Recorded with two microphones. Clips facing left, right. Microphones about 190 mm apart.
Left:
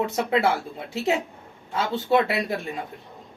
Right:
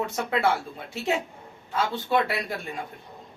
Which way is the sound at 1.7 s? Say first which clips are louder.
Left 3 dB; 25° left (ahead or behind).